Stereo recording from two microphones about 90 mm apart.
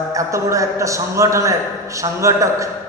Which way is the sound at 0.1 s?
35° right (ahead or behind).